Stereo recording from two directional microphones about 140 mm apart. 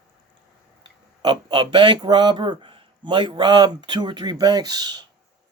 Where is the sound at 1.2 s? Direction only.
35° right (ahead or behind).